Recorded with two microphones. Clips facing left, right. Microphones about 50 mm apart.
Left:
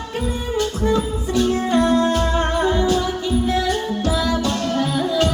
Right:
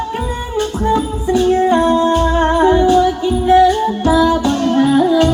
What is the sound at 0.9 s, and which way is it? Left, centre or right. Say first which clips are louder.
Music: right 5 dB; centre.